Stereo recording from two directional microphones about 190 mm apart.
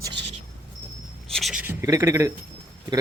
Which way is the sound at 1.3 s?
Centre (ahead or behind).